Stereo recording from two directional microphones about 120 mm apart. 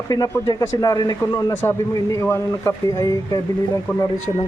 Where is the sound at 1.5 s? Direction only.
20° left (ahead or behind).